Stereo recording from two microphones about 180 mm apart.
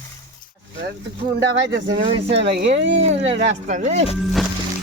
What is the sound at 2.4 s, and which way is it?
Speech, 75° right (ahead or behind).